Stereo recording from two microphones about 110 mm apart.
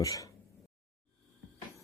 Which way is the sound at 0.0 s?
30° left (ahead or behind).